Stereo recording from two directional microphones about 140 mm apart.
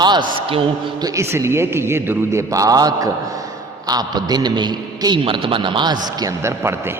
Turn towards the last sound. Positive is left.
turn(degrees=-20)  # may be behind; listen again after turning